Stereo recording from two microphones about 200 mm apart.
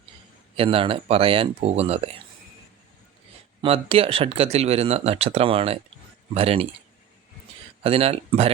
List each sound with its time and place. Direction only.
0.5 s speech: 30° right (ahead or behind)
3.6 s speech: 30° right (ahead or behind)
7.9 s speech: 30° right (ahead or behind)